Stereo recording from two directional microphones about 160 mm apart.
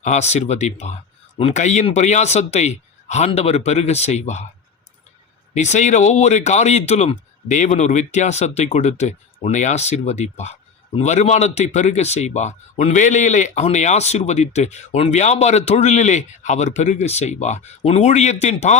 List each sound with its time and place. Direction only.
0.0 s speech: 45° left (ahead or behind)
5.5 s speech: 45° left (ahead or behind)